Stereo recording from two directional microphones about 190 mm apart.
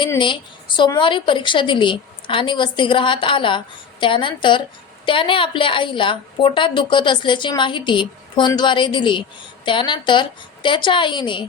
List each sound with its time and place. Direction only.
0.8 s a woman's voice: 25° left (ahead or behind)